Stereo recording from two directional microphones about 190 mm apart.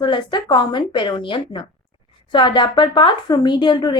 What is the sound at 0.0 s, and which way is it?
A woman's voice, 25° left (ahead or behind).